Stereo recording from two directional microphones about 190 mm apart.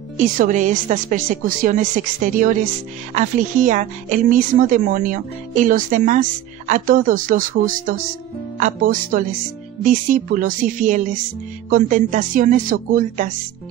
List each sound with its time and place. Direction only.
0.2 s speech: 40° right (ahead or behind)